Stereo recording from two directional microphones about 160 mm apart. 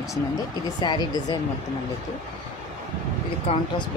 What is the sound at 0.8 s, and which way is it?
Speech, 25° left (ahead or behind).